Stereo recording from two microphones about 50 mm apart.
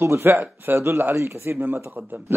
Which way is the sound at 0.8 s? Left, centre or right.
Right.